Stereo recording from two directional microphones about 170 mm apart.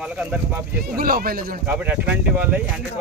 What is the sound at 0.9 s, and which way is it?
Speech, 60° right (ahead or behind).